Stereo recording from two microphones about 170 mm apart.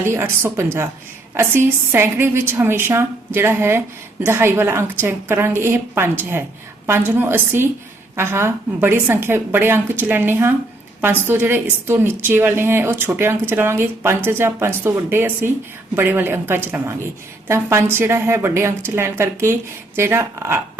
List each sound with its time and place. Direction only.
0.0 s a woman's voice: 15° right (ahead or behind)